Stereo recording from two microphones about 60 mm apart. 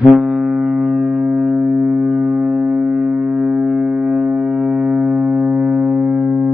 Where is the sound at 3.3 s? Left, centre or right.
Right.